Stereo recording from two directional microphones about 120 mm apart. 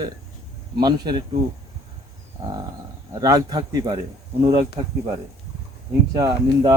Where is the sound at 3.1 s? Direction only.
35° right (ahead or behind).